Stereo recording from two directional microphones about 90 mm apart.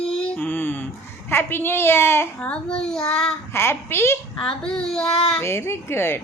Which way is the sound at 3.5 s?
30° left (ahead or behind).